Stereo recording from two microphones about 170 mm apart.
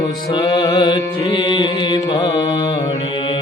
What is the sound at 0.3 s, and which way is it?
Music, 25° left (ahead or behind).